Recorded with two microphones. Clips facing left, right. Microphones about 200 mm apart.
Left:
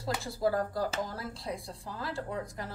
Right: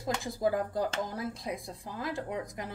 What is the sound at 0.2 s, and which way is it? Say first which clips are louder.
A woman's voice: left 2 dB; 15° right (ahead or behind).